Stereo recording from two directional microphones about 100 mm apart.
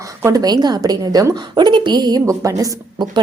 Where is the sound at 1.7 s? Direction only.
50° right (ahead or behind).